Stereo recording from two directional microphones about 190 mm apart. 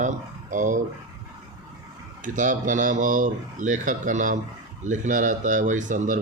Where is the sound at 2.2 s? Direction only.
45° right (ahead or behind).